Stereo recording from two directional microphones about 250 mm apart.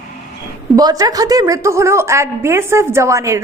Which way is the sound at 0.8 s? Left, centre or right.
Centre.